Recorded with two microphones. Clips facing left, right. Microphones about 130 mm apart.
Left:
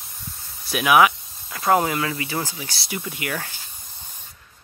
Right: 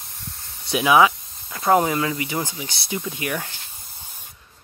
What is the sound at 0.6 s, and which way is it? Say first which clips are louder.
Speech: right 1 dB; 25° right (ahead or behind).